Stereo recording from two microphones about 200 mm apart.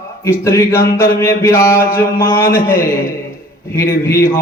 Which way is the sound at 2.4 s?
45° left (ahead or behind).